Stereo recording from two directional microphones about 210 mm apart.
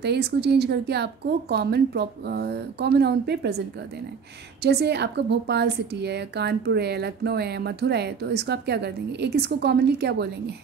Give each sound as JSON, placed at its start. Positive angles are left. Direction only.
{"t": 0.0, "sound": "a woman's voice", "side_deg": -50}
{"t": 4.6, "sound": "a woman's voice", "side_deg": -50}